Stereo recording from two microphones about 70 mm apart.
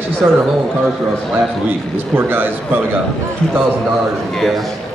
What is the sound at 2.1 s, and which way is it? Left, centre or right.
Speech, right.